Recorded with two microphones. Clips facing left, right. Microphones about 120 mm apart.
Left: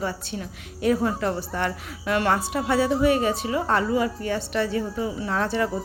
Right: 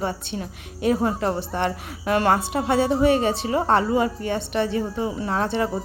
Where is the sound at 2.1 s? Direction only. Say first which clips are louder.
Right 3 dB; 35° right (ahead or behind).